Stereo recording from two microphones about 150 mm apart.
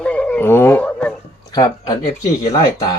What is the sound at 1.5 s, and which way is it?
Speech, 30° left (ahead or behind).